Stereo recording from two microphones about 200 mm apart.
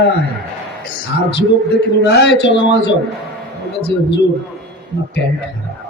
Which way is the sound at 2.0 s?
60° left (ahead or behind).